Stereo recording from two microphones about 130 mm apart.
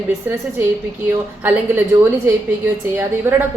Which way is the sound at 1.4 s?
15° right (ahead or behind).